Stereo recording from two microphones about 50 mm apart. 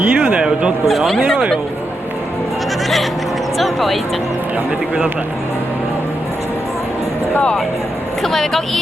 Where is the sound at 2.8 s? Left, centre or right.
Centre.